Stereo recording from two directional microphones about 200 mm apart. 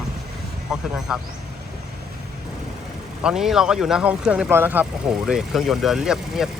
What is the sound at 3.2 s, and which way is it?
Speech, centre (ahead or behind).